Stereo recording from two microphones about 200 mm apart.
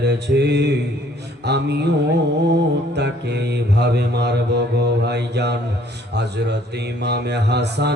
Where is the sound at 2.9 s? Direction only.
55° right (ahead or behind).